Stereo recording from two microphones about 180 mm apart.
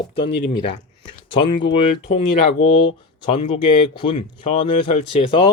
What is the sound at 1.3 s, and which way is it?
Speech, 30° left (ahead or behind).